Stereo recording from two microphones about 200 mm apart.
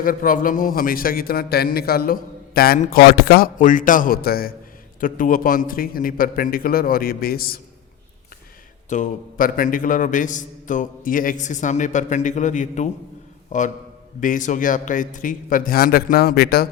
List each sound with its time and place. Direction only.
0.0 s a man's voice: 45° left (ahead or behind)
8.9 s a man's voice: 40° left (ahead or behind)